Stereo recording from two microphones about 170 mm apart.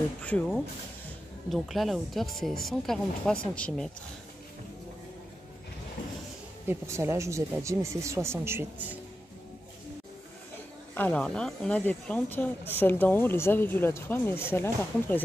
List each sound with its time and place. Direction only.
0.2 s speech: 10° left (ahead or behind)
6.7 s speech: 15° right (ahead or behind)
11.0 s speech: 5° left (ahead or behind)